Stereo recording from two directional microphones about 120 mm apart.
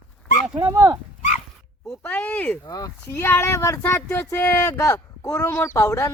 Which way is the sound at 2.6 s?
30° left (ahead or behind).